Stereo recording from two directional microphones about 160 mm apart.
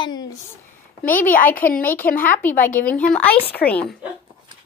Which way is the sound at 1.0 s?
10° left (ahead or behind).